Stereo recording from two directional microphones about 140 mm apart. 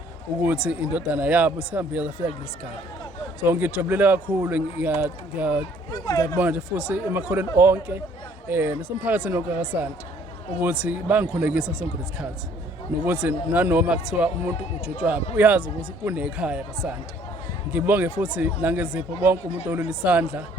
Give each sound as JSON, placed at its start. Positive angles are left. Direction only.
{"t": 0.4, "sound": "speech", "side_deg": -10}
{"t": 3.4, "sound": "speech", "side_deg": -15}
{"t": 5.9, "sound": "speech", "side_deg": 25}
{"t": 6.4, "sound": "speech", "side_deg": -10}